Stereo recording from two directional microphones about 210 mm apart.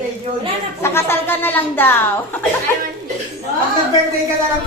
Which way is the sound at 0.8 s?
10° left (ahead or behind).